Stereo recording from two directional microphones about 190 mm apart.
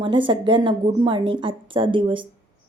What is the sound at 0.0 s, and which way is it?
A woman's voice, 25° right (ahead or behind).